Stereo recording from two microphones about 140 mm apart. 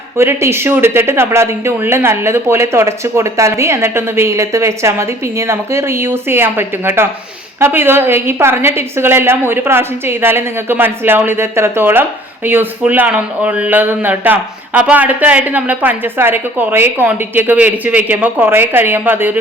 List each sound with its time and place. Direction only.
0.2 s speech: 20° right (ahead or behind)